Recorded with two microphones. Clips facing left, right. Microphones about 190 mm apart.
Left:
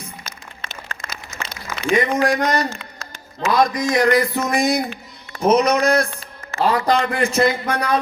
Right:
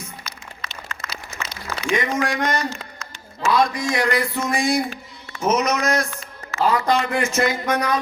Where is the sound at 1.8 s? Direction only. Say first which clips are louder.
Left 4 dB; 35° left (ahead or behind).